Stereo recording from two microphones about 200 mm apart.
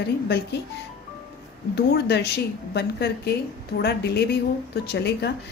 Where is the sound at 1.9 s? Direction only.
55° left (ahead or behind).